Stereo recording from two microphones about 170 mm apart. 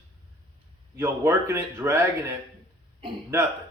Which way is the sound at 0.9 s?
15° right (ahead or behind).